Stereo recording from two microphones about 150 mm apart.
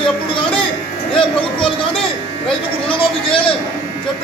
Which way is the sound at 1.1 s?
35° left (ahead or behind).